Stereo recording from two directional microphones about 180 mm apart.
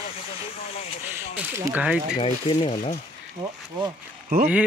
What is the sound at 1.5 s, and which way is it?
Speech, 15° right (ahead or behind).